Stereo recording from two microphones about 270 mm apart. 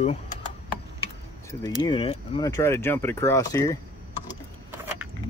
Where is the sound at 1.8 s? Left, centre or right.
Centre.